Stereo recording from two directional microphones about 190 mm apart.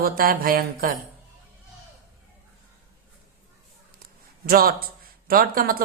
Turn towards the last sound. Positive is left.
turn(degrees=-50)  # may be behind; listen again after turning